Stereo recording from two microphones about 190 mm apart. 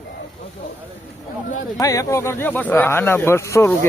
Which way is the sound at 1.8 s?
15° left (ahead or behind).